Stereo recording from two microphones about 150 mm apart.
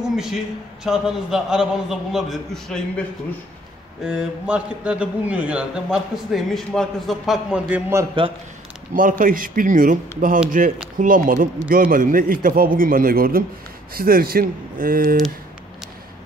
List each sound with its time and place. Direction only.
0.1 s a man's voice: 5° right (ahead or behind)
4.0 s a man's voice: 5° right (ahead or behind)
7.7 s a man's voice: 20° right (ahead or behind)
9.2 s speech: 65° right (ahead or behind)